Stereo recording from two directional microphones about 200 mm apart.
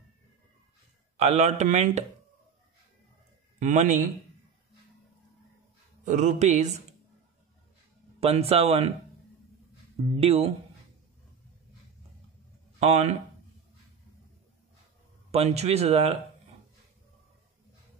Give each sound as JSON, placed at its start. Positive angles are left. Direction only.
{"t": 1.1, "sound": "speech", "side_deg": -30}
{"t": 3.5, "sound": "a man's voice", "side_deg": -40}
{"t": 6.0, "sound": "speech", "side_deg": -40}
{"t": 8.2, "sound": "speech", "side_deg": -30}
{"t": 10.0, "sound": "speech", "side_deg": -30}
{"t": 12.7, "sound": "speech", "side_deg": -35}
{"t": 15.3, "sound": "speech", "side_deg": -30}